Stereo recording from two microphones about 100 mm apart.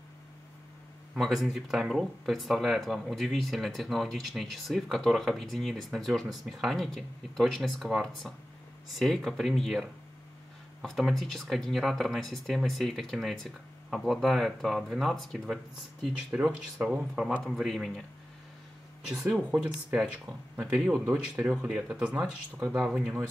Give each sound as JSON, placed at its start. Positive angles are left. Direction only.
{"t": 1.1, "sound": "speech", "side_deg": -5}
{"t": 16.3, "sound": "speech", "side_deg": -10}
{"t": 17.4, "sound": "speech", "side_deg": 5}
{"t": 19.0, "sound": "speech", "side_deg": -5}
{"t": 21.1, "sound": "speech", "side_deg": -20}